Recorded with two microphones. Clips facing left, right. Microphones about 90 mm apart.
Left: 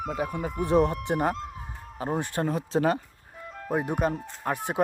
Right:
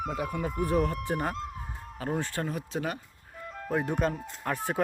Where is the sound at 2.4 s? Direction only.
35° left (ahead or behind).